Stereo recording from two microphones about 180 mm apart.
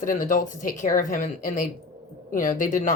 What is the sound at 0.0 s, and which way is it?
A woman's voice, 45° left (ahead or behind).